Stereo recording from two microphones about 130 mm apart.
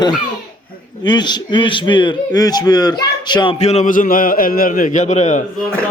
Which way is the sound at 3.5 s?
60° left (ahead or behind).